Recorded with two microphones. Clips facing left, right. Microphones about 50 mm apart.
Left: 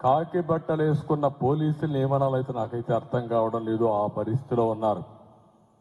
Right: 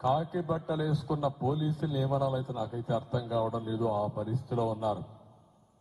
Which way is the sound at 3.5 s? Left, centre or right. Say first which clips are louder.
Left 7 dB; left.